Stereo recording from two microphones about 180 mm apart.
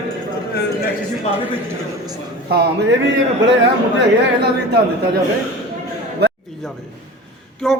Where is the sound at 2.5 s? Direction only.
65° right (ahead or behind).